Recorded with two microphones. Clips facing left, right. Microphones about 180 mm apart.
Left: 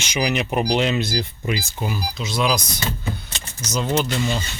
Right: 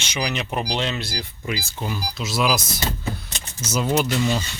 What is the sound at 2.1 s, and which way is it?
Speech, 5° right (ahead or behind).